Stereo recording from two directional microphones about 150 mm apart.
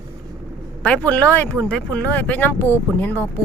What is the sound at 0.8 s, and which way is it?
Speech, 10° left (ahead or behind).